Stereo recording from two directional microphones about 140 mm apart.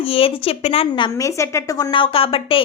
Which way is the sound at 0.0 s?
40° left (ahead or behind).